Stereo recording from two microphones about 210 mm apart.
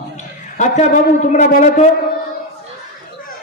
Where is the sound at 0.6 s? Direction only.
35° left (ahead or behind).